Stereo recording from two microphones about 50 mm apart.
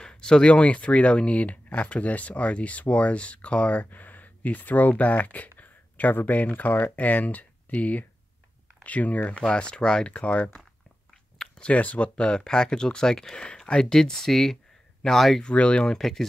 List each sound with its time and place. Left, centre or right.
0.0 s speech: centre; by 9.4 s left
9.4 s speech: centre
15.4 s speech: left; by 16.3 s centre